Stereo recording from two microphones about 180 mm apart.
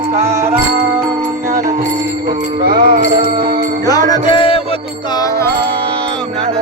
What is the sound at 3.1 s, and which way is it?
Music, 25° right (ahead or behind).